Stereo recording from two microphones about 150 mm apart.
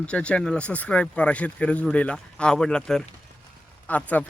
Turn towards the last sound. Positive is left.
turn(degrees=10)  # may be behind; listen again after turning